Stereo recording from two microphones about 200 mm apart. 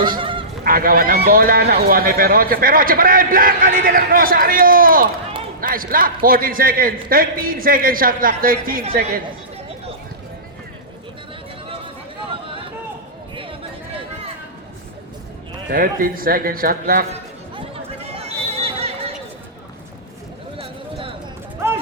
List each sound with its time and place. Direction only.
0.2 s bleat: 25° right (ahead or behind)
0.6 s speech: 45° right (ahead or behind)
13.3 s a sound: 25° right (ahead or behind)
15.7 s speech: 45° right (ahead or behind)
18.1 s neigh: 30° right (ahead or behind)